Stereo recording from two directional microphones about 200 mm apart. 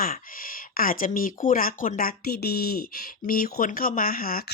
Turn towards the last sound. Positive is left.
turn(degrees=45)  # may be behind; listen again after turning